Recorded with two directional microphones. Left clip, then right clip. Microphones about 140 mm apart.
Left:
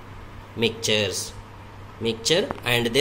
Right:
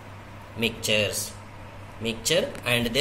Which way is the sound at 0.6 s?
75° left (ahead or behind).